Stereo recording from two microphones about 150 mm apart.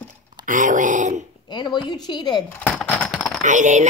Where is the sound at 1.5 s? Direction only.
30° left (ahead or behind).